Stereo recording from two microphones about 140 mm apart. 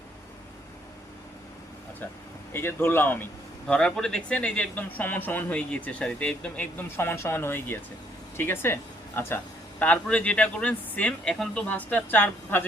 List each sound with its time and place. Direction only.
2.5 s speech: 15° left (ahead or behind)